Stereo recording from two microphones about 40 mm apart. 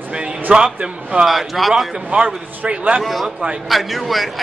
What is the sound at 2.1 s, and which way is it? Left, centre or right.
Speech, right.